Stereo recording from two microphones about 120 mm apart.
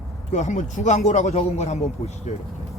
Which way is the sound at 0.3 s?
80° left.